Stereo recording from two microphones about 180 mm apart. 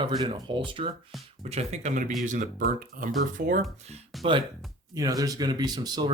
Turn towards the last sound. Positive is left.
turn(degrees=-20)  # may be behind; listen again after turning